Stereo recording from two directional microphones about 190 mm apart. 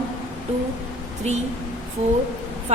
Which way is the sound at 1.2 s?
35° right (ahead or behind).